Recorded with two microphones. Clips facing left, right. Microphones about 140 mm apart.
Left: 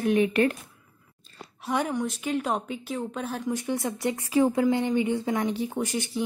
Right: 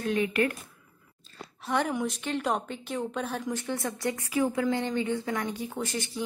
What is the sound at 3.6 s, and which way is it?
Speech, 20° left (ahead or behind).